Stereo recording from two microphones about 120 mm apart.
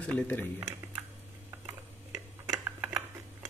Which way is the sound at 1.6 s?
25° right (ahead or behind).